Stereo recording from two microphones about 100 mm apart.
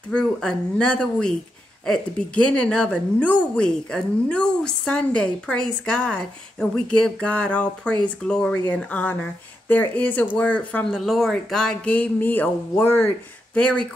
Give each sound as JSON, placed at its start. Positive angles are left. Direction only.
{"t": 0.1, "sound": "a woman's voice", "side_deg": 10}
{"t": 11.0, "sound": "a woman's voice", "side_deg": 0}
{"t": 13.6, "sound": "a woman's voice", "side_deg": 10}